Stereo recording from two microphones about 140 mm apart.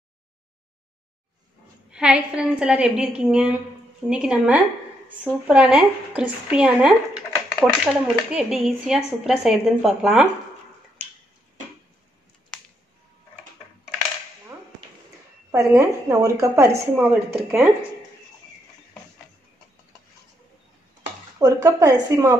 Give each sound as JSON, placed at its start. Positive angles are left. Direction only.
{"t": 1.9, "sound": "speech", "side_deg": -5}
{"t": 15.5, "sound": "a woman's voice", "side_deg": -20}
{"t": 21.4, "sound": "a woman's voice", "side_deg": -25}